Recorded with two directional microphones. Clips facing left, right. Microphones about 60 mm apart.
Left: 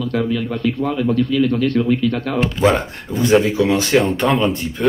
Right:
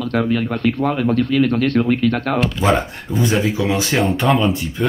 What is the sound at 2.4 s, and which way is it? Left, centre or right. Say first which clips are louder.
Speech: left 3 dB; left.